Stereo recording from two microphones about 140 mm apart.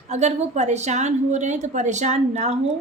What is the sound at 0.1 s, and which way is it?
A woman's voice, 55° right (ahead or behind).